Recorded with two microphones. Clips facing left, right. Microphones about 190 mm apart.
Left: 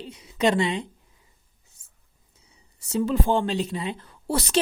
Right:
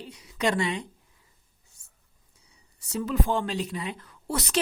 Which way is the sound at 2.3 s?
25° left (ahead or behind).